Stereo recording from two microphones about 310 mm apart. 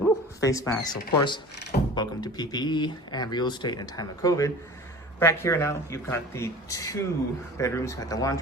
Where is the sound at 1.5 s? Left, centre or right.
Left.